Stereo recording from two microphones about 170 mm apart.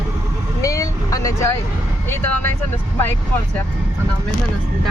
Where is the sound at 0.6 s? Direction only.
20° left (ahead or behind).